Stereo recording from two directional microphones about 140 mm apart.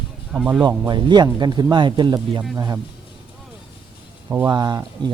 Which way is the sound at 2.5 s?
20° right (ahead or behind).